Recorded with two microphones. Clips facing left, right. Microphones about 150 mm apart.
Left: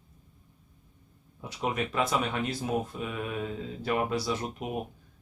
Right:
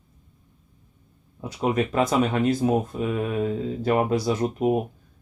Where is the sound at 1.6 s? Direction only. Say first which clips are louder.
Right 7 dB; 40° right (ahead or behind).